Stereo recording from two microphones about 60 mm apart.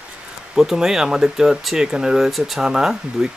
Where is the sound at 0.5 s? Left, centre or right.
Centre.